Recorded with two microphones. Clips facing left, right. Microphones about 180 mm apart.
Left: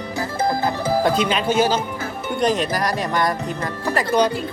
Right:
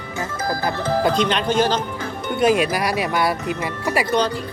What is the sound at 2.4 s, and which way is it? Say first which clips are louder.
Speech: right 3 dB; 10° right (ahead or behind).